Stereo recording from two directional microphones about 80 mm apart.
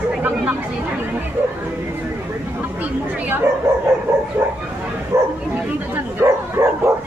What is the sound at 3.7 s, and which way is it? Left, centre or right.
Dog, right.